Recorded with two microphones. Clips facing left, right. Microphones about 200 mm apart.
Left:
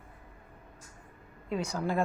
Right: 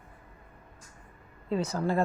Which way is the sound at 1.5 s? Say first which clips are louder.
Right 3 dB; centre (ahead or behind).